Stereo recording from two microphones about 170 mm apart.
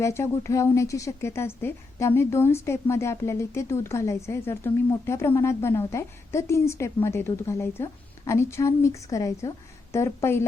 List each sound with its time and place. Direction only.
0.0 s speech: 15° left (ahead or behind)